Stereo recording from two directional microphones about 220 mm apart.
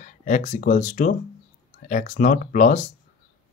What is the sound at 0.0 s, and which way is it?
Speech, 35° left (ahead or behind).